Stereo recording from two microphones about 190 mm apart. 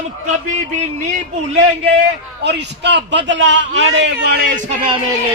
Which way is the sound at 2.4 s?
65° right (ahead or behind).